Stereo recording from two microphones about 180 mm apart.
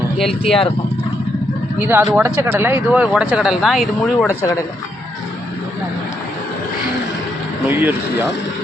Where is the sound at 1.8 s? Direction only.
10° right (ahead or behind).